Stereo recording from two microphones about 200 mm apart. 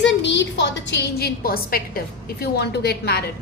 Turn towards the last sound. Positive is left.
turn(degrees=55)  # may be behind; listen again after turning